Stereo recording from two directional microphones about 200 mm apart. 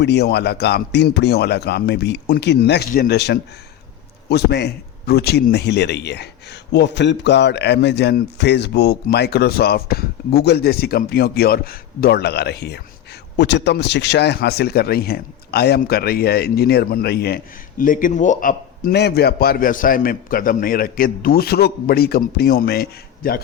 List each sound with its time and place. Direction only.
0.0 s a man's voice: 55° left (ahead or behind)